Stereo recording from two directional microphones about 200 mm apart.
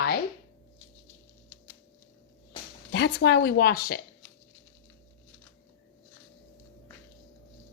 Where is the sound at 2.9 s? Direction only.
55° left (ahead or behind).